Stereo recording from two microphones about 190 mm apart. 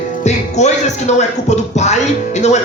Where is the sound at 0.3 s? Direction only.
35° left (ahead or behind).